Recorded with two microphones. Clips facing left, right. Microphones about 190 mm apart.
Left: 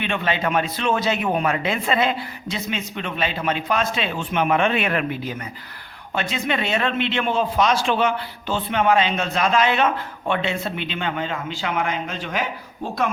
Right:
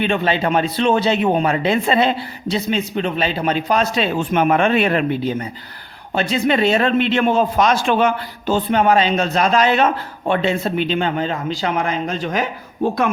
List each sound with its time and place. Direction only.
0.0 s speech: 35° right (ahead or behind)